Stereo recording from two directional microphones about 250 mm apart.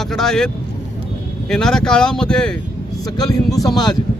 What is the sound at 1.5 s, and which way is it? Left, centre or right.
Speech, centre.